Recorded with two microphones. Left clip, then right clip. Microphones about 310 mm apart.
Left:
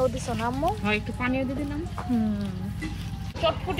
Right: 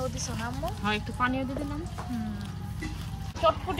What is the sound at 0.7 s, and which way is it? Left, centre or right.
Speech, centre.